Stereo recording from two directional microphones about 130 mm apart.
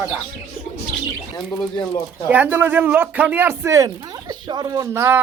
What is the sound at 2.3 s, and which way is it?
Speech, 15° right (ahead or behind).